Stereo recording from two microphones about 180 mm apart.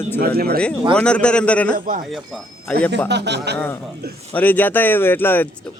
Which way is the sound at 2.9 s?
70° right (ahead or behind).